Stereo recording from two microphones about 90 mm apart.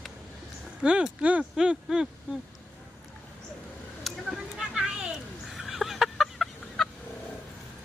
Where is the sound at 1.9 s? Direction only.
5° right (ahead or behind).